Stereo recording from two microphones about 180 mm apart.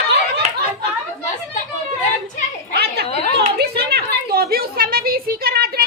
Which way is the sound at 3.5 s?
65° right (ahead or behind).